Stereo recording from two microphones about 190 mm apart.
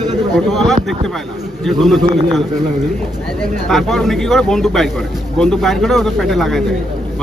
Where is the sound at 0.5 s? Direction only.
Centre (ahead or behind).